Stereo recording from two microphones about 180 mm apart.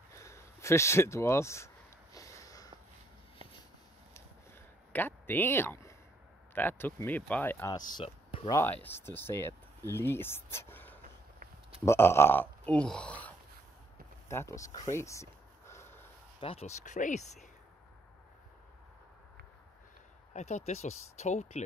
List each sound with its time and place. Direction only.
0.1 s speech: 15° left (ahead or behind)
2.1 s a sound: 20° left (ahead or behind)
4.9 s speech: 10° left (ahead or behind)
7.9 s a sound: 30° left (ahead or behind)
8.5 s speech: 15° left (ahead or behind)
14.3 s speech: 15° left (ahead or behind)
14.9 s a sound: 15° left (ahead or behind)
16.3 s speech: 35° left (ahead or behind)
20.3 s speech: 40° left (ahead or behind)